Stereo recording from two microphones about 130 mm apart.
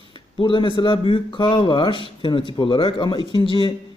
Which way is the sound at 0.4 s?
40° left (ahead or behind).